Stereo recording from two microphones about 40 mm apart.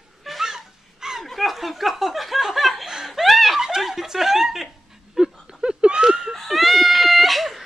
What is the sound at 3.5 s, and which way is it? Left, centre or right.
Snicker, centre.